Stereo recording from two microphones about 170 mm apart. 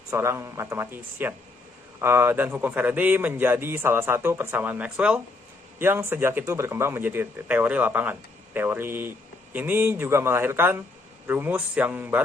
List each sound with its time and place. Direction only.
0.1 s a man's voice: 15° right (ahead or behind)